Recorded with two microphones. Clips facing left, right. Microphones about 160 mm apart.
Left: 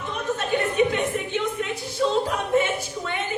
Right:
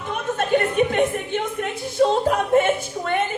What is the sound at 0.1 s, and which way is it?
A woman's voice, 50° right (ahead or behind).